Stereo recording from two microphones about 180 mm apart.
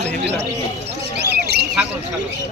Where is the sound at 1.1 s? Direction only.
65° right (ahead or behind).